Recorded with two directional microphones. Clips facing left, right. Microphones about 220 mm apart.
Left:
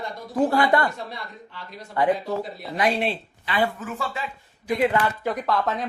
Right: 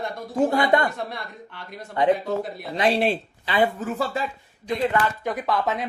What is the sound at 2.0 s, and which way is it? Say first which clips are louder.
Speech: right 2 dB; 20° right (ahead or behind).